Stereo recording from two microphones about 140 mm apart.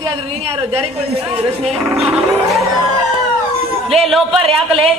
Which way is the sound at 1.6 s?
Centre (ahead or behind).